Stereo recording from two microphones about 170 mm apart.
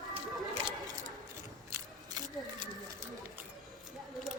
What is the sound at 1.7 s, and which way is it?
Single-lens reflex camera, 20° right (ahead or behind).